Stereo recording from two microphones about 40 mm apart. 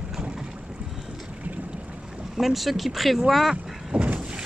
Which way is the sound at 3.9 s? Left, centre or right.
Right.